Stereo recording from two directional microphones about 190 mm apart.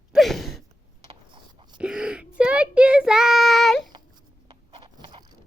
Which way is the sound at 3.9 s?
25° right (ahead or behind).